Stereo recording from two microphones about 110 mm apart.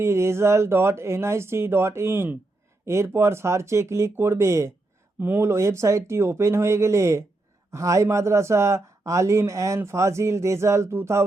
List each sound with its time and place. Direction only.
0.0 s speech: 25° right (ahead or behind)